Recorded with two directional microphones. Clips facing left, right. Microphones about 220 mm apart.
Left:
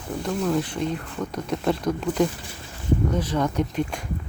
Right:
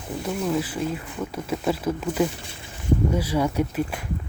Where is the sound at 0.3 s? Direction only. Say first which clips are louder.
Left 1 dB; 5° right (ahead or behind).